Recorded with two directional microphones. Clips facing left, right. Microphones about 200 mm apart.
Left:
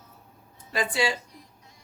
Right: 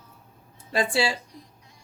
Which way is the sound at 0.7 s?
30° right (ahead or behind).